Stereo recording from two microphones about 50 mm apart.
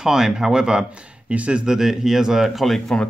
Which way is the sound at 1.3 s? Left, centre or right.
Right.